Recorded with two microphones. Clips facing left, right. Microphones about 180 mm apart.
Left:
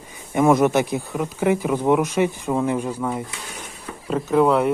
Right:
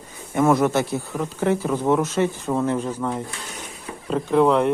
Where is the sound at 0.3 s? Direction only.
15° left (ahead or behind).